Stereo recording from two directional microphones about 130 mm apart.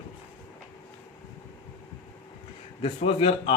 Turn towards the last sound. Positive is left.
turn(degrees=50)  # may be behind; listen again after turning